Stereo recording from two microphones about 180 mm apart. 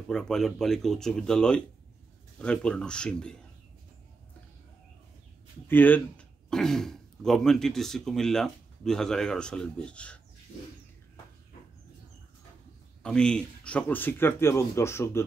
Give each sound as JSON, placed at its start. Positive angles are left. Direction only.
{"t": 0.1, "sound": "a man's voice", "side_deg": 5}
{"t": 5.7, "sound": "a man's voice", "side_deg": 10}
{"t": 13.0, "sound": "speech", "side_deg": 5}